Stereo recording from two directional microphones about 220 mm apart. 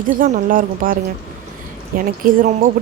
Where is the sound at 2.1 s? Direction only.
40° right (ahead or behind).